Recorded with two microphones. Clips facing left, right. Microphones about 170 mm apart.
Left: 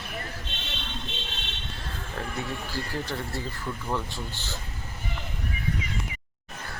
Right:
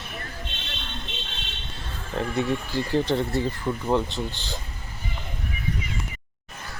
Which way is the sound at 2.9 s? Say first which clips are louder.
Right 12 dB; 25° right (ahead or behind).